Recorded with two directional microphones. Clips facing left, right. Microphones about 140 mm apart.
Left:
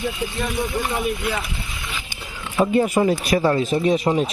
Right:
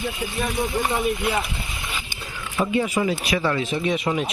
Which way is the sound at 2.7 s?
45° left (ahead or behind).